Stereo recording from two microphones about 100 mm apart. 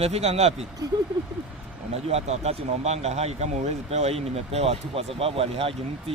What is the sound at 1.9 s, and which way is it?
Speech, 90° right.